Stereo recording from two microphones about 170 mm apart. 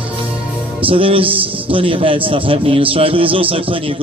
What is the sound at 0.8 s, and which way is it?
A man's voice, 30° right (ahead or behind).